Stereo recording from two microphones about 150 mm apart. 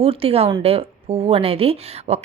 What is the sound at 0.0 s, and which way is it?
Speech, 40° right (ahead or behind).